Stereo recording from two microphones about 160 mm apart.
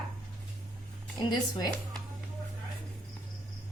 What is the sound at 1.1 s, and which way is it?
Speech, 25° left (ahead or behind).